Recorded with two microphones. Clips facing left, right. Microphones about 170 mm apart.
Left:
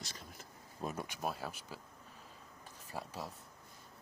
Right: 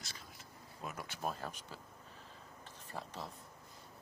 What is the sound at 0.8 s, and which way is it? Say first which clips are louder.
Speech: left 5 dB; 30° left (ahead or behind).